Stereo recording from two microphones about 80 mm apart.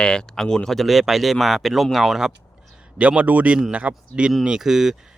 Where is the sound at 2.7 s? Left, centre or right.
Centre.